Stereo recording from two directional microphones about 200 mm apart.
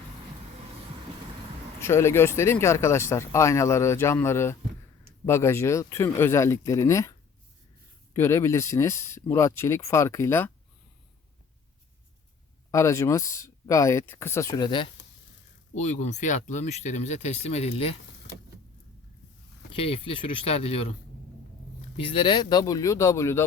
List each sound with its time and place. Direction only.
1.8 s speech: 15° left (ahead or behind)
12.7 s speech: 15° left (ahead or behind)
15.7 s speech: 35° left (ahead or behind)
19.7 s speech: 30° left (ahead or behind)
21.9 s speech: 25° left (ahead or behind)